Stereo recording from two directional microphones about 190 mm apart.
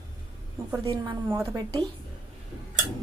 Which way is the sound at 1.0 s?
15° right (ahead or behind).